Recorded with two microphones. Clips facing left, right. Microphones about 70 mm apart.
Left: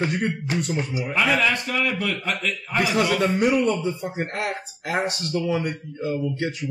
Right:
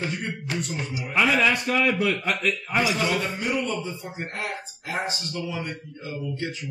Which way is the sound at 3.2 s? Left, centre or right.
Left.